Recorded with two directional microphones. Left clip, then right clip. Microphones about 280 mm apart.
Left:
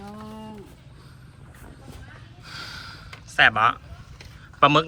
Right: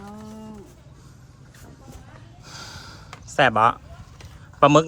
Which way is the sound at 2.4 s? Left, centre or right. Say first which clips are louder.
Left 3 dB; centre.